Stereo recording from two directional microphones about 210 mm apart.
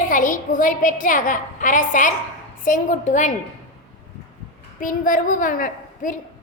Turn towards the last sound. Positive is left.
turn(degrees=40)  # may be behind; listen again after turning